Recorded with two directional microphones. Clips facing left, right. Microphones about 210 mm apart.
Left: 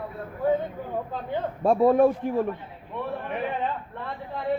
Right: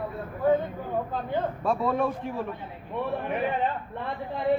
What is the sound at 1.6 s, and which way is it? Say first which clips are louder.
Speech: left 10 dB; 45° left (ahead or behind).